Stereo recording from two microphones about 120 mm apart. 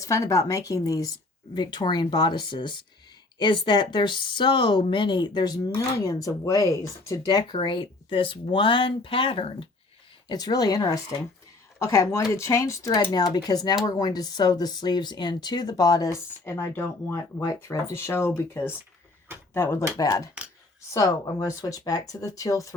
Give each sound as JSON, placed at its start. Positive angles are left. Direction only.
{"t": 0.0, "sound": "speech", "side_deg": 25}
{"t": 10.2, "sound": "speech", "side_deg": 35}